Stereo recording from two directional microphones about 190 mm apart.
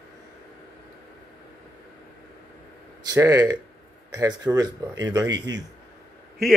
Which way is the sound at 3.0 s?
20° right (ahead or behind).